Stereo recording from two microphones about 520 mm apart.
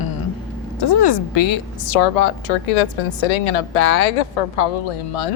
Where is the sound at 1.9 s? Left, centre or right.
Left.